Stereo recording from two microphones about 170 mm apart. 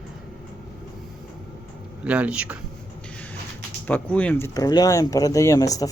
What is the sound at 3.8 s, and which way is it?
Speech, 10° left (ahead or behind).